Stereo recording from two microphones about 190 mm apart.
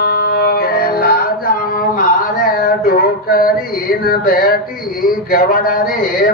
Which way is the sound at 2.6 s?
50° left (ahead or behind).